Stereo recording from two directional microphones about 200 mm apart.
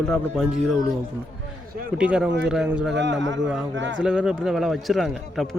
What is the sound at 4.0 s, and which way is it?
A man's voice, 5° right (ahead or behind).